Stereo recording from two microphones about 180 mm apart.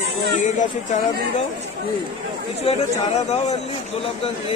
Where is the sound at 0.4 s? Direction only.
40° left (ahead or behind).